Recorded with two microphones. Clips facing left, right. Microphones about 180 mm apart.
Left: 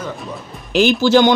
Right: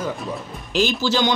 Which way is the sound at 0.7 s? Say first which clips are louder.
Left 8 dB; 60° left (ahead or behind).